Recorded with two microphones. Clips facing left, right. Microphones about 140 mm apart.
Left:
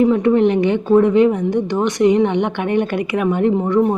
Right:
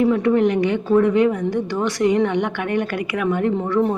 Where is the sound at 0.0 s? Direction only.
25° left (ahead or behind).